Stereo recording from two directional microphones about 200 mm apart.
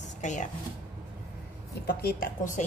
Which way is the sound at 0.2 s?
40° left (ahead or behind).